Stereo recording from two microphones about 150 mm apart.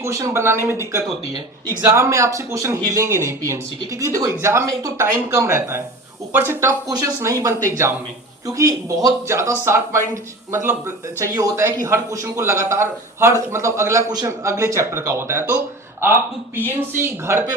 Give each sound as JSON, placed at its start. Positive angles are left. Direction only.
{"t": 0.0, "sound": "a man's voice", "side_deg": -20}